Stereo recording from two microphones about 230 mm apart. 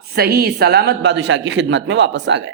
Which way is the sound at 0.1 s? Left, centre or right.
Right.